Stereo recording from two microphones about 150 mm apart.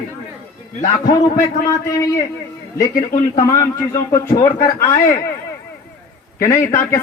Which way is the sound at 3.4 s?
20° left (ahead or behind).